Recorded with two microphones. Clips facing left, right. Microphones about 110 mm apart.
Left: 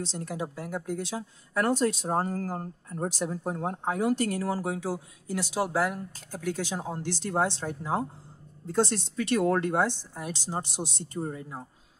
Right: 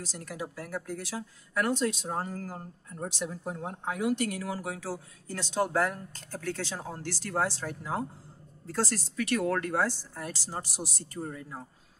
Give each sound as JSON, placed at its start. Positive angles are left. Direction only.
{"t": 0.0, "sound": "speech", "side_deg": 25}